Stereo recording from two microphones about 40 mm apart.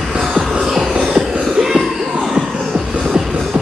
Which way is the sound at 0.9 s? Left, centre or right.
Centre.